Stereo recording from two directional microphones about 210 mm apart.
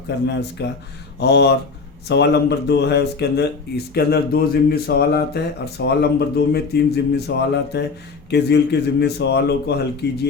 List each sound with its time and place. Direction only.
0.1 s speech: 55° left (ahead or behind)